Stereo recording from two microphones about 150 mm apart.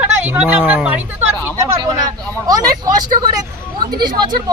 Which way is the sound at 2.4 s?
25° right (ahead or behind).